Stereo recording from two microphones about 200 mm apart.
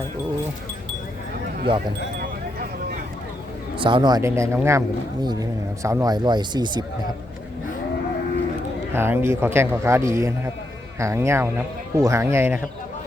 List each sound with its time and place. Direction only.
3.8 s a man's voice: 25° right (ahead or behind)
8.9 s a man's voice: 10° right (ahead or behind)